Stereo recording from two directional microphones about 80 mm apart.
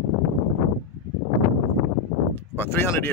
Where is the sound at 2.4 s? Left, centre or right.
Left.